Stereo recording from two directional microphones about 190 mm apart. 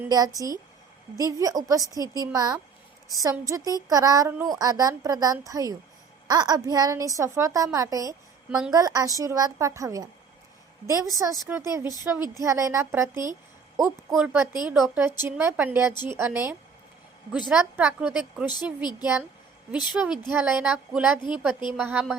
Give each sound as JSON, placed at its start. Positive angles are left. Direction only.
{"t": 0.0, "sound": "a woman's voice", "side_deg": -20}
{"t": 8.4, "sound": "a woman's voice", "side_deg": -5}
{"t": 8.7, "sound": "a woman's voice", "side_deg": -20}
{"t": 13.7, "sound": "a woman's voice", "side_deg": -5}
{"t": 18.4, "sound": "speech", "side_deg": 20}
{"t": 19.7, "sound": "a woman's voice", "side_deg": -5}